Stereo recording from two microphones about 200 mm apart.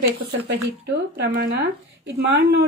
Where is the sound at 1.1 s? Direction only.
55° right (ahead or behind).